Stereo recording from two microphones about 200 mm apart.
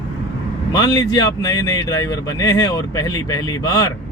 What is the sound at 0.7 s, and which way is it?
Speech, 20° left (ahead or behind).